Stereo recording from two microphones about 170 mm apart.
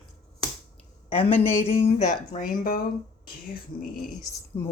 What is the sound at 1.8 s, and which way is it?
Speech, 40° left (ahead or behind).